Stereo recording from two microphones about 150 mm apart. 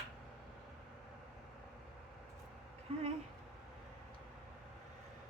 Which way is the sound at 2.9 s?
40° right (ahead or behind).